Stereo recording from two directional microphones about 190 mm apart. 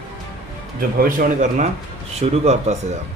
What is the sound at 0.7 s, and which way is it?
Speech, 50° right (ahead or behind).